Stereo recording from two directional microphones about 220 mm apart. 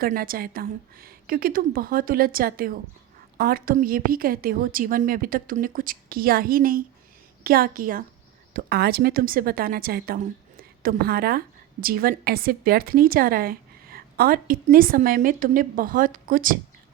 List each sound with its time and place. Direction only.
0.0 s a woman's voice: 40° right (ahead or behind)